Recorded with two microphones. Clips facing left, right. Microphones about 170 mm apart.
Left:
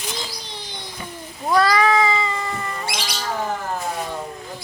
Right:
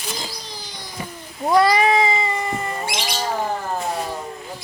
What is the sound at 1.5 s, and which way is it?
Cat, 20° right (ahead or behind).